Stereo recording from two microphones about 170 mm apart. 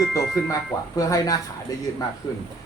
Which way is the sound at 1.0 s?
20° left (ahead or behind).